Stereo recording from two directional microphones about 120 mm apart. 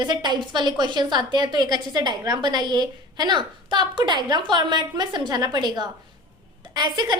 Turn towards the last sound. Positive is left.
turn(degrees=-35)  # may be behind; listen again after turning